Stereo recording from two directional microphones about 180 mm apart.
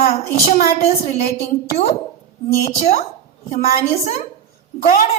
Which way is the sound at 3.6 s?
55° left (ahead or behind).